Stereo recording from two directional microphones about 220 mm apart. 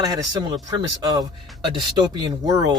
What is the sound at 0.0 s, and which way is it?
Speech, 15° right (ahead or behind).